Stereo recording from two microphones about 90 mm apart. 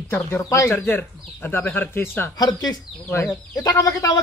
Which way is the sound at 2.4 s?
50° left (ahead or behind).